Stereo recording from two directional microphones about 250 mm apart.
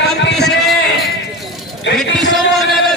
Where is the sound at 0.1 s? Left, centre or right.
Centre.